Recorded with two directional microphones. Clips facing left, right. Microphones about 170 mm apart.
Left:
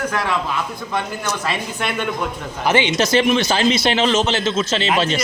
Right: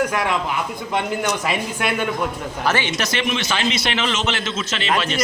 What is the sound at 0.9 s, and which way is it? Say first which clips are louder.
Speech: right 2 dB; 15° right (ahead or behind).